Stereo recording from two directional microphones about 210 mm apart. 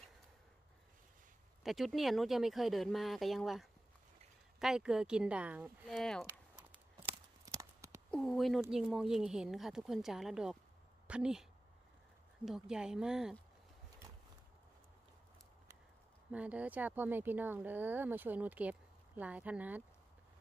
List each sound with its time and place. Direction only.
1.6 s speech: centre (ahead or behind)
7.0 s a sound: 15° right (ahead or behind)
8.1 s speech: centre (ahead or behind)
12.4 s speech: centre (ahead or behind)
16.3 s speech: 5° right (ahead or behind)